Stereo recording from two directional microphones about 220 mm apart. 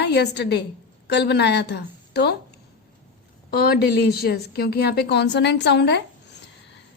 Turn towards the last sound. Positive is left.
turn(degrees=50)  # may be behind; listen again after turning